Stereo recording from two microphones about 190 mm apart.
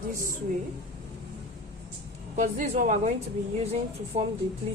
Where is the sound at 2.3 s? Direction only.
40° right (ahead or behind).